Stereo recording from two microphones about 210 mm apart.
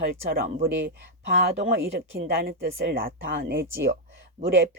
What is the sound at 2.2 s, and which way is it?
Speech, 45° right (ahead or behind).